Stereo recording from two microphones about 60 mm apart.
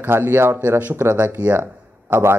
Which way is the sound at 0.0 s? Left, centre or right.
Right.